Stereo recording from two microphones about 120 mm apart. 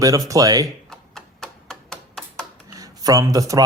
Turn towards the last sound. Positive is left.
turn(degrees=-30)  # may be behind; listen again after turning